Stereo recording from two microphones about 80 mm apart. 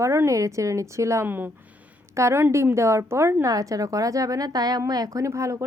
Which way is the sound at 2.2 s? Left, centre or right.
Right.